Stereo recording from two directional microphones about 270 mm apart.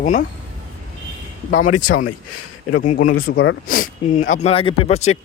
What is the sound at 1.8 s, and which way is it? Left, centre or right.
Speech, left.